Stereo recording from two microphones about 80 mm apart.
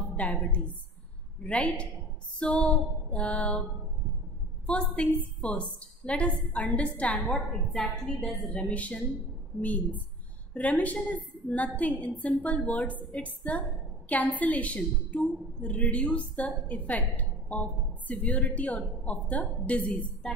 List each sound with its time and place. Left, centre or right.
0.1 s a woman's voice: centre
4.6 s a woman's voice: centre
7.3 s a woman's voice: centre
8.6 s a woman's voice: centre